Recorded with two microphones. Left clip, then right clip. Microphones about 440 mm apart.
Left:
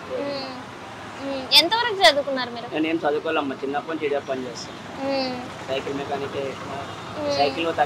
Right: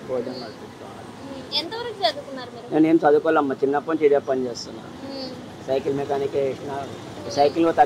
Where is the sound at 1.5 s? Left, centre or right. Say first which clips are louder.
Left 10 dB; left.